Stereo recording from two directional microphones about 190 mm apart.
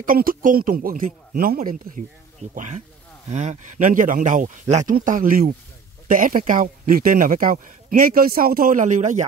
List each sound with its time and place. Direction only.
0.0 s a man's voice: 50° right (ahead or behind)